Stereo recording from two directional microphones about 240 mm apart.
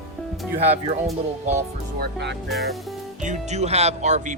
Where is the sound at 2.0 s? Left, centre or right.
Right.